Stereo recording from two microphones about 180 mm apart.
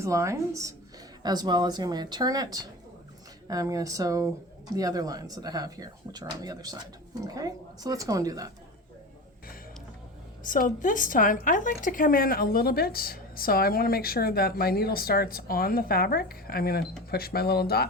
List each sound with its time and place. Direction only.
0.0 s a woman's voice: 15° right (ahead or behind)
10.4 s a woman's voice: 50° left (ahead or behind)